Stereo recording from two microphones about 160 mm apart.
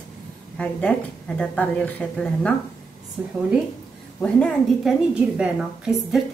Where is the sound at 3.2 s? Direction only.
15° right (ahead or behind).